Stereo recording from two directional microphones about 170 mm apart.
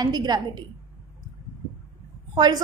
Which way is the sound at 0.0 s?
25° right (ahead or behind).